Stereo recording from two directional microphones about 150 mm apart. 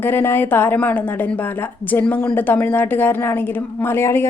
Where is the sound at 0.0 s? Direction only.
15° left (ahead or behind).